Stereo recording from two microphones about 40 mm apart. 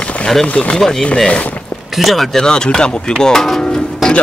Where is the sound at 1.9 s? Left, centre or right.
Centre.